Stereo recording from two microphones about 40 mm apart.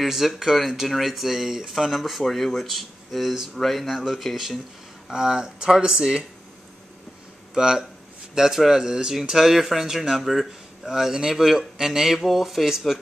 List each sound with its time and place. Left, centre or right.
0.0 s speech: centre
5.1 s speech: centre
7.5 s speech: centre